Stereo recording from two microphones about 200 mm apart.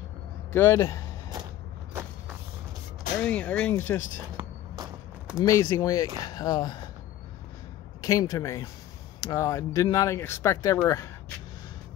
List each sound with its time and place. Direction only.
0.5 s speech: 10° left (ahead or behind)
3.2 s speech: 5° left (ahead or behind)
5.4 s speech: 15° left (ahead or behind)
8.0 s speech: 15° left (ahead or behind)